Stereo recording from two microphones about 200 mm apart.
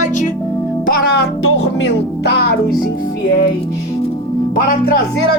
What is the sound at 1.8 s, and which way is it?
Music, 55° left (ahead or behind).